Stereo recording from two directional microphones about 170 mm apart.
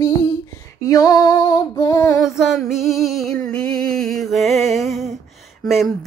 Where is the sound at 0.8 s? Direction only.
20° left (ahead or behind).